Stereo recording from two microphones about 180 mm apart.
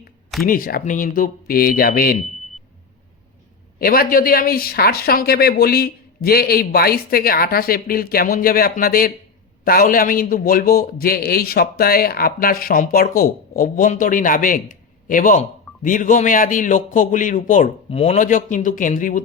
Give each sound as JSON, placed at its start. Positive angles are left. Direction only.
{"t": 0.4, "sound": "a man's voice", "side_deg": 50}
{"t": 3.8, "sound": "a man's voice", "side_deg": 55}